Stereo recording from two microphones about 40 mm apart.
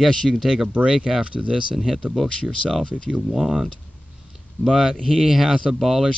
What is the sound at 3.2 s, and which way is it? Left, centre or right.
Speech, centre.